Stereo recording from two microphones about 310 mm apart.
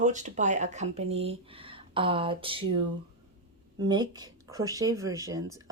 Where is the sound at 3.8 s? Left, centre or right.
Centre.